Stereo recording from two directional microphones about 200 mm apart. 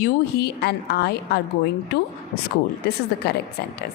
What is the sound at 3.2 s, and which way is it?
Speech, 55° left (ahead or behind).